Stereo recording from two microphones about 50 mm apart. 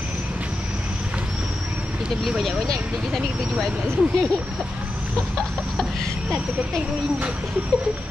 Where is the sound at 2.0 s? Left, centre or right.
Centre.